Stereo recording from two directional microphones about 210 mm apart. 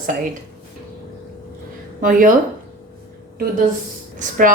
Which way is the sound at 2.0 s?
40° right (ahead or behind).